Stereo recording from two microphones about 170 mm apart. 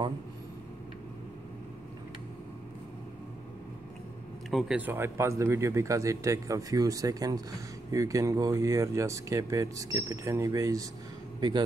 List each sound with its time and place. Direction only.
4.5 s speech: centre (ahead or behind); by 10.9 s 20° right (ahead or behind)